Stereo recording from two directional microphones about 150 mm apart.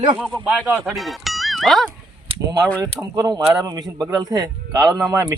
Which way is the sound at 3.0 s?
25° right (ahead or behind).